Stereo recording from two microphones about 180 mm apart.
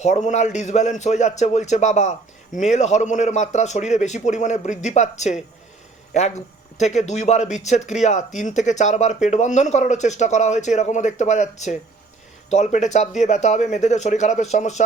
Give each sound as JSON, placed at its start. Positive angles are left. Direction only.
{"t": 0.0, "sound": "speech", "side_deg": 40}